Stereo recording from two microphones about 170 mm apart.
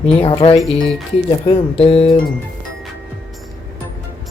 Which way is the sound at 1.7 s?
35° left (ahead or behind).